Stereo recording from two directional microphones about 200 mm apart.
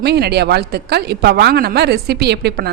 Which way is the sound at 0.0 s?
55° right (ahead or behind).